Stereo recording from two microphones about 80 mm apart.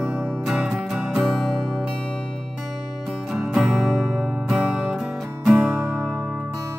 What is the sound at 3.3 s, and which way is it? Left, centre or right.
Music, centre.